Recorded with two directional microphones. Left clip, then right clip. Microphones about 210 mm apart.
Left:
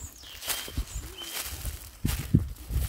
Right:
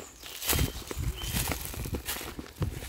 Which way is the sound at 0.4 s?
50° right (ahead or behind).